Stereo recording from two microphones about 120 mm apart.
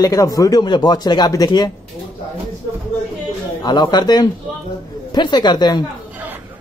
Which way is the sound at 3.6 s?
35° left (ahead or behind).